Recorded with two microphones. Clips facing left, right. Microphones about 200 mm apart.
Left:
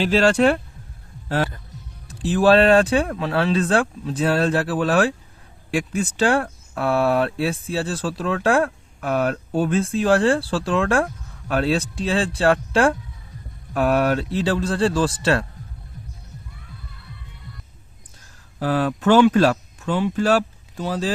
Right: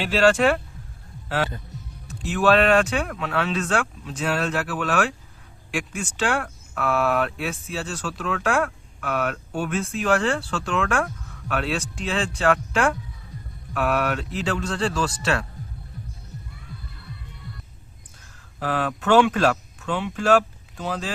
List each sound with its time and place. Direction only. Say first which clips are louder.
2.0 s speech: left 4 dB; 30° left (ahead or behind)
18.6 s speech: left 5 dB; 40° left (ahead or behind)